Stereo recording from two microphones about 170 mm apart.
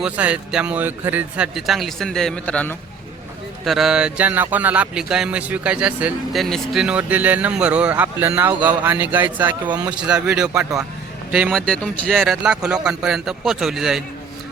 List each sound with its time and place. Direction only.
0.0 s a man's voice: 5° right (ahead or behind)
10.6 s speech: 20° right (ahead or behind)
11.3 s speech: 5° right (ahead or behind)
11.6 s a man's voice: 5° left (ahead or behind)